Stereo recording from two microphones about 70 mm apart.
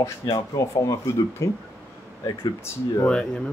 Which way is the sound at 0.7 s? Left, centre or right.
Left.